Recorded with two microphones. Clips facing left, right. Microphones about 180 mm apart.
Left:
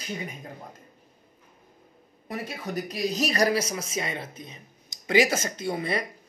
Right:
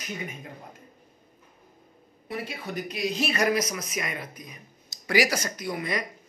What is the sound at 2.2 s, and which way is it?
Speech, 40° left (ahead or behind).